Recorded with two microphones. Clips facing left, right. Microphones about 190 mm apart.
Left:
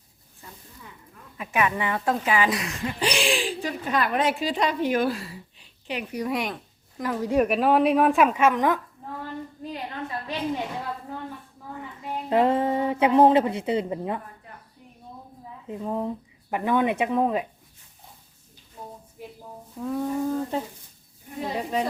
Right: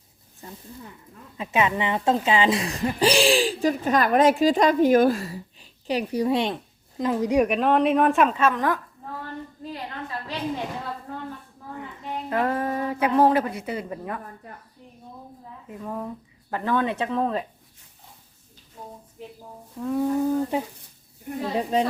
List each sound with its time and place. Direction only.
1.4 s speech: 20° right (ahead or behind)
7.4 s speech: 5° left (ahead or behind)
9.6 s a sound: 20° left (ahead or behind)
12.3 s speech: 25° left (ahead or behind)
15.6 s speech: 25° left (ahead or behind)
19.8 s speech: 5° right (ahead or behind)